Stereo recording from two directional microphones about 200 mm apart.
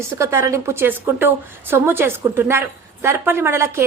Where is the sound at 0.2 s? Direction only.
15° right (ahead or behind).